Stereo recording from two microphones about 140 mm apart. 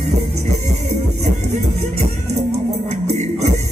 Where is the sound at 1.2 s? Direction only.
55° right (ahead or behind).